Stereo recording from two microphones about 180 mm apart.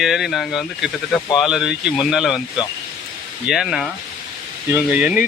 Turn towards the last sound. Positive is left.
turn(degrees=-5)  # may be behind; listen again after turning